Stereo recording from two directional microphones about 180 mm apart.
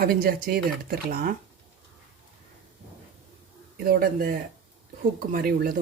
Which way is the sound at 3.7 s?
55° right (ahead or behind).